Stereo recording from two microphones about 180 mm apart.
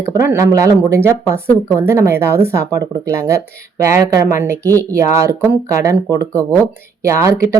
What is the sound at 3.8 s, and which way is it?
Speech, 15° right (ahead or behind).